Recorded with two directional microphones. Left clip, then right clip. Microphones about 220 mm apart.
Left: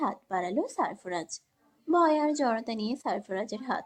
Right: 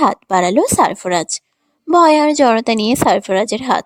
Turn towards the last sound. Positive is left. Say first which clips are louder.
# right 17 dB
turn(degrees=-50)  # may be behind; listen again after turning